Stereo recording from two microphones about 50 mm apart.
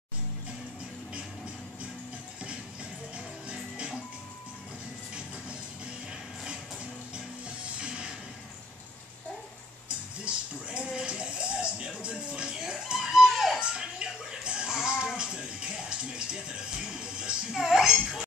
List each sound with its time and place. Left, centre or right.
3.4 s music: right
7.4 s music: right
9.8 s music: right; by 13.6 s centre
13.6 s music: centre
17.6 s a sound: centre